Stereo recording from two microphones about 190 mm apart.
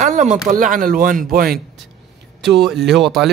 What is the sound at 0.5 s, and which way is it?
Speech, 45° right (ahead or behind).